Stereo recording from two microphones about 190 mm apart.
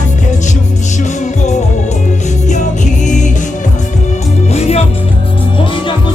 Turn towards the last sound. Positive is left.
turn(degrees=35)  # may be behind; listen again after turning